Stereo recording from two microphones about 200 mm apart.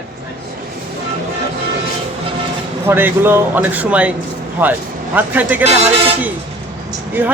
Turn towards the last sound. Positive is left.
turn(degrees=-10)  # may be behind; listen again after turning